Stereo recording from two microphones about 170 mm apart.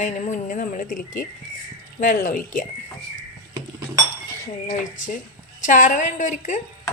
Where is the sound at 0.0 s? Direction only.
50° left (ahead or behind).